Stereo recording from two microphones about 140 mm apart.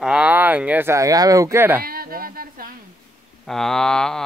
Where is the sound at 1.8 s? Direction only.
90° right.